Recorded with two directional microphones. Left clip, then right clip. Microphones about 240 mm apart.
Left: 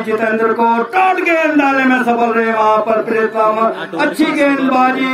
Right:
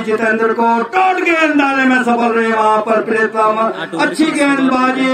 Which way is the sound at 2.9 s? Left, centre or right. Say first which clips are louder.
Even; right.